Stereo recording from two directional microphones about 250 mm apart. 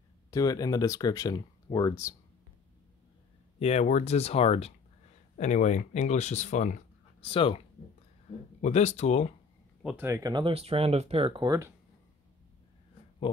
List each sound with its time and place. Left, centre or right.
0.3 s speech: centre
3.5 s speech: left
9.8 s speech: centre